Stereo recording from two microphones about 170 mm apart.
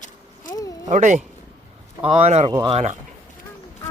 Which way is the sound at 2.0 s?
35° right (ahead or behind).